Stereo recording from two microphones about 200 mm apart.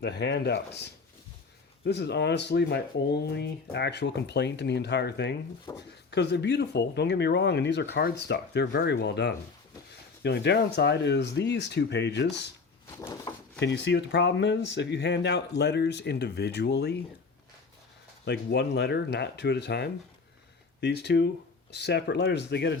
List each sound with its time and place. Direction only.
0.0 s speech: 60° left (ahead or behind)
5.7 s speech: 15° left (ahead or behind)
6.1 s speech: 60° left (ahead or behind)
13.0 s speech: 15° left (ahead or behind)
13.6 s speech: 60° left (ahead or behind)
18.3 s speech: 60° left (ahead or behind)